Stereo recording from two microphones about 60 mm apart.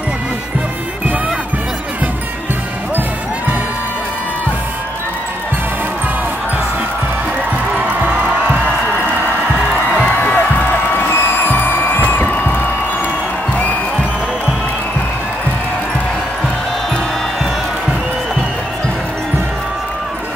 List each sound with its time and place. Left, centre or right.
7.7 s music: right
10.0 s music: left